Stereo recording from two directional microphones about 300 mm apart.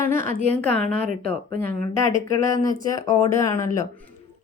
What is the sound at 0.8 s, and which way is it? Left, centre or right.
Speech, right.